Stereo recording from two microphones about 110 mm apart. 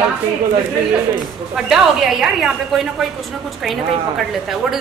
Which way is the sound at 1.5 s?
5° right (ahead or behind).